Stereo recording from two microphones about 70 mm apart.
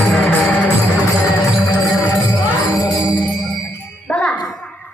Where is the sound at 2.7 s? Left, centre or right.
Left.